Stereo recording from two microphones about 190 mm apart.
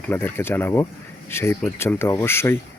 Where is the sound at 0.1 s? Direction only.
10° left (ahead or behind).